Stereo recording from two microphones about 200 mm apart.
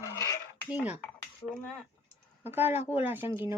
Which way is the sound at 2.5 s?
10° right (ahead or behind).